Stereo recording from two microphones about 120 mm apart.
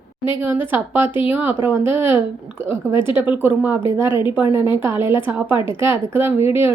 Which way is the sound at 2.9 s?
45° left (ahead or behind).